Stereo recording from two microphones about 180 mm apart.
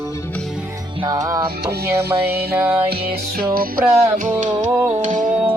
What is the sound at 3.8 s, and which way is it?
Music, 15° right (ahead or behind).